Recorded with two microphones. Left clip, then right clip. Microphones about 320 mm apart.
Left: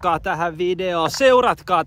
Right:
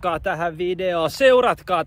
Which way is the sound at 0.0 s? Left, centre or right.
Centre.